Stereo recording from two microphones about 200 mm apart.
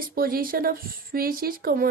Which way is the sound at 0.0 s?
45° right (ahead or behind).